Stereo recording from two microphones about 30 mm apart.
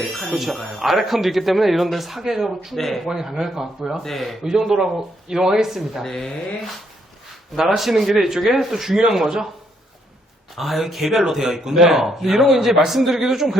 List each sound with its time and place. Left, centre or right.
0.3 s speech: centre
2.2 s speech: centre
2.7 s speech: centre
3.1 s speech: centre
4.0 s speech: centre
4.4 s speech: centre
6.0 s speech: centre
7.8 s speech: centre
10.5 s speech: centre